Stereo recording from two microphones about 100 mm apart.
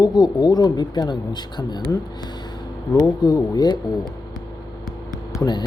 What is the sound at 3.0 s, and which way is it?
Speech, 40° left (ahead or behind).